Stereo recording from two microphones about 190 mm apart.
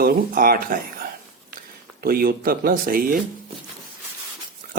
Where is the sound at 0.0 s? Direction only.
50° right (ahead or behind).